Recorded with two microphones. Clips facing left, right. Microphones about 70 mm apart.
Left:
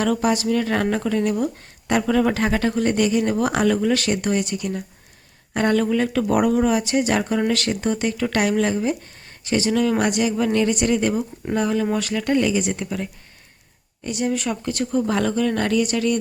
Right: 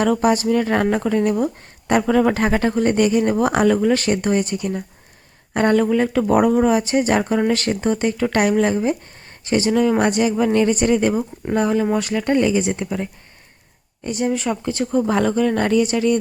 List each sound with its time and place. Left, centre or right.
0.0 s speech: right